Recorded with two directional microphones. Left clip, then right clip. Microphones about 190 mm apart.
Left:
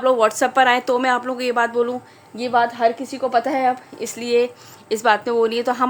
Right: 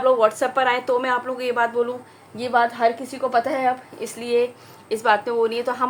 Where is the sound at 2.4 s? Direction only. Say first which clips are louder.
Left 1 dB; 40° left (ahead or behind).